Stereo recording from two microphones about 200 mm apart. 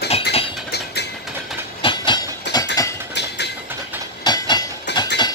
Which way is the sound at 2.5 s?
60° left (ahead or behind).